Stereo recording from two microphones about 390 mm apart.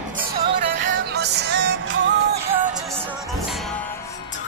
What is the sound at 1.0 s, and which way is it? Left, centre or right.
Music, right.